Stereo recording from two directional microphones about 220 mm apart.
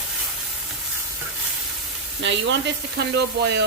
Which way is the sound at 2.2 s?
55° right (ahead or behind).